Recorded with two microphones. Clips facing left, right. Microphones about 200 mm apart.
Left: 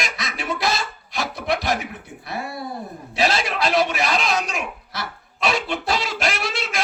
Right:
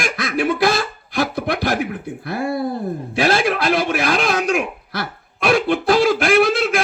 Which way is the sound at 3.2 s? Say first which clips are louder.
Right 4 dB; 55° right (ahead or behind).